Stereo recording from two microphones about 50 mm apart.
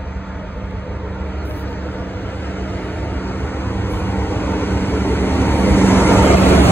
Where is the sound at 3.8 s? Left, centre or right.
Left.